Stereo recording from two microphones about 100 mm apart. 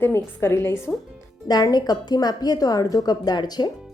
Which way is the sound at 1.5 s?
40° left (ahead or behind).